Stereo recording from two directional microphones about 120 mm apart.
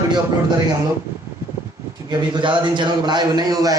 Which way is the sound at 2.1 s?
40° right (ahead or behind).